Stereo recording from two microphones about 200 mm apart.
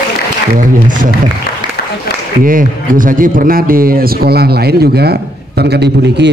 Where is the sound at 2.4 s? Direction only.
45° right (ahead or behind).